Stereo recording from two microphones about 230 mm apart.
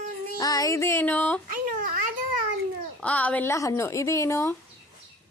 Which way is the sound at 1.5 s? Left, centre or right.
Right.